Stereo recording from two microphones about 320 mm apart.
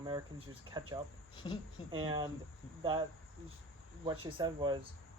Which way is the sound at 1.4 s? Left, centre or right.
Centre.